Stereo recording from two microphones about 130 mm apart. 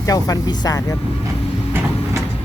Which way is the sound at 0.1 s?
30° left (ahead or behind).